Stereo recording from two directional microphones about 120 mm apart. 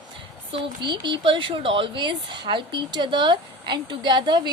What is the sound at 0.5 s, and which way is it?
Speech, 40° right (ahead or behind).